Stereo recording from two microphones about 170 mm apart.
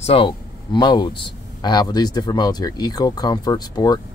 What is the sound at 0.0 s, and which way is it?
Speech, 35° left (ahead or behind).